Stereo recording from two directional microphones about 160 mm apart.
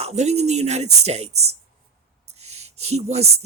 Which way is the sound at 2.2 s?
45° right (ahead or behind).